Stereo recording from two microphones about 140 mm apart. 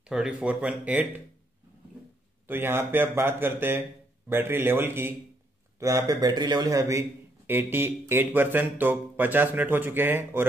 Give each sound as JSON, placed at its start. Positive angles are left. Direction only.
{"t": 0.1, "sound": "a man's voice", "side_deg": -5}
{"t": 2.4, "sound": "a man's voice", "side_deg": -15}